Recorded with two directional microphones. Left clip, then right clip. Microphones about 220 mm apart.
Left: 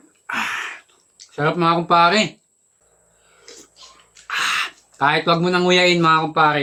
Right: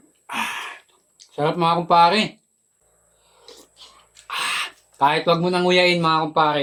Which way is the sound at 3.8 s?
15° right (ahead or behind).